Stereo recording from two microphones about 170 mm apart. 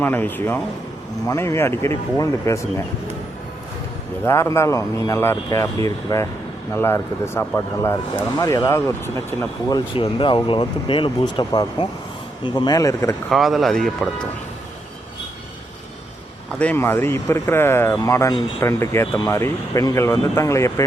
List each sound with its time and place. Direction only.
0.0 s speech: 10° left (ahead or behind)
4.3 s speech: 15° left (ahead or behind)
13.3 s speech: centre (ahead or behind)
16.6 s speech: 10° left (ahead or behind)